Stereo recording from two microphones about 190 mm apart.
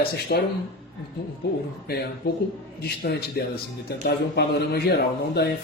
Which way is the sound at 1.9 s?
55° left (ahead or behind).